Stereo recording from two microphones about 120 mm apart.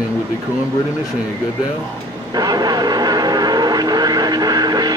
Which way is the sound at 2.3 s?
35° right (ahead or behind).